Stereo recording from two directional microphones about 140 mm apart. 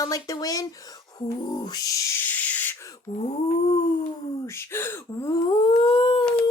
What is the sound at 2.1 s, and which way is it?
Owl, 15° left (ahead or behind).